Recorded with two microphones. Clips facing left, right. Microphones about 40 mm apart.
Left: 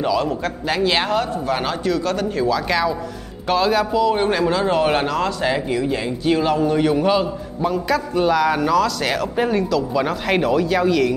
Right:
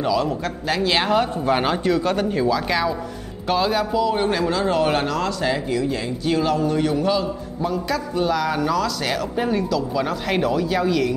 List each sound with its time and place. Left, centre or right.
0.0 s speech: centre
1.1 s a man's voice: centre
2.4 s a man's voice: centre
4.1 s speech: centre
7.1 s a man's voice: left
7.7 s speech: centre